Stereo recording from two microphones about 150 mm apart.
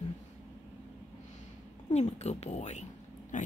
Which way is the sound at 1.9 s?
50° left (ahead or behind).